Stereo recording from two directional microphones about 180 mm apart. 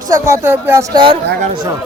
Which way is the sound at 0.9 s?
25° right (ahead or behind).